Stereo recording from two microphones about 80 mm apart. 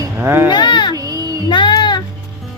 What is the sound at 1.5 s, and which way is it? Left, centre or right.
Music, left.